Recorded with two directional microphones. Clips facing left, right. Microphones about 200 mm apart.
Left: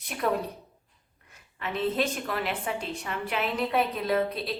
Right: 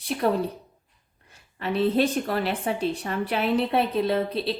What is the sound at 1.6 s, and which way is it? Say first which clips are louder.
A woman's voice: right 6 dB; 35° right (ahead or behind).